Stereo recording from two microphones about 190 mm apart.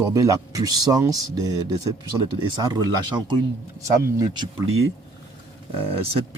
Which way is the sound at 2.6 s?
20° right (ahead or behind).